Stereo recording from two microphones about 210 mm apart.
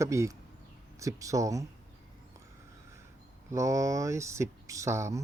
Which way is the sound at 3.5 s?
15° right (ahead or behind).